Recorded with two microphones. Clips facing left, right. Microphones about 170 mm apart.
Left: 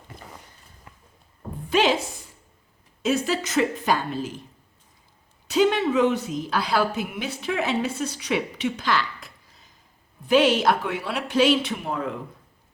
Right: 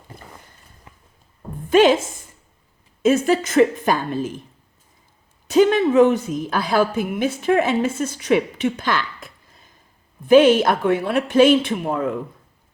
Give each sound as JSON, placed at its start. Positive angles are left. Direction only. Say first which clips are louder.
{"t": 0.9, "sound": "a sound", "louder": "right 1 dB", "side_deg": -20}
{"t": 1.7, "sound": "a woman's voice", "louder": "right 7 dB", "side_deg": -50}
{"t": 5.5, "sound": "a woman's voice", "louder": "right 5 dB", "side_deg": -50}